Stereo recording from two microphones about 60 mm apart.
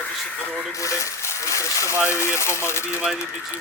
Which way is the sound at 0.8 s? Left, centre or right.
Left.